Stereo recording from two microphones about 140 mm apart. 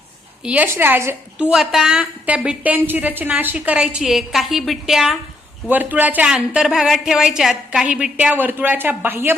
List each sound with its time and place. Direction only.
0.4 s speech: 10° right (ahead or behind)
1.5 s speech: 5° right (ahead or behind)
5.6 s speech: 10° right (ahead or behind)